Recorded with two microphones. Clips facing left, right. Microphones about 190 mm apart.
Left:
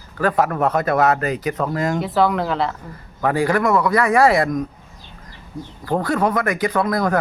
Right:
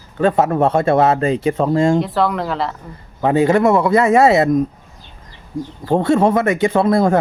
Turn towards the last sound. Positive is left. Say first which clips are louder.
# right 5 dB
turn(degrees=-25)  # may be behind; listen again after turning